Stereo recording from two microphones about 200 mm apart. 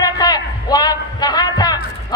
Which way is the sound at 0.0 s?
20° left (ahead or behind).